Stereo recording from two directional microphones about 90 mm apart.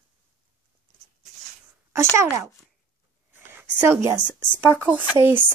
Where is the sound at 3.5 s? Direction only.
25° right (ahead or behind).